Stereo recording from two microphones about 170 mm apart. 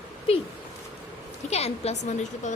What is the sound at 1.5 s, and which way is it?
A woman's voice, 35° left (ahead or behind).